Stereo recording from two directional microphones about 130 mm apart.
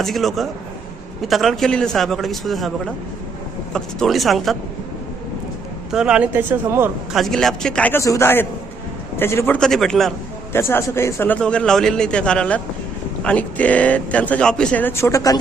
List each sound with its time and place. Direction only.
0.0 s a man's voice: centre (ahead or behind)
5.9 s speech: 5° right (ahead or behind)
7.1 s a man's voice: centre (ahead or behind)
8.0 s a man's voice: 20° left (ahead or behind)
9.6 s a man's voice: 5° left (ahead or behind)
10.5 s a man's voice: 20° left (ahead or behind)